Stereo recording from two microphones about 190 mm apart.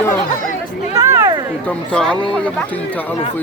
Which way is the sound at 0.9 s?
15° right (ahead or behind).